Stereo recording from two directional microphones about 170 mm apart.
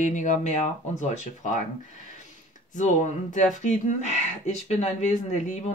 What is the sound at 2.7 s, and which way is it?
Speech, 45° left (ahead or behind).